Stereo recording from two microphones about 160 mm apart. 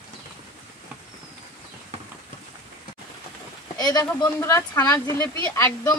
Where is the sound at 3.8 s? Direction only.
25° left (ahead or behind).